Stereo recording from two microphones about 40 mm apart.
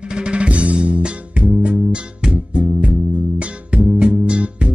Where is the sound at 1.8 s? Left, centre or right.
Centre.